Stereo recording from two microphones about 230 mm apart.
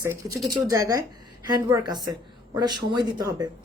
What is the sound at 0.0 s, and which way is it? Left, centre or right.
Speech, centre.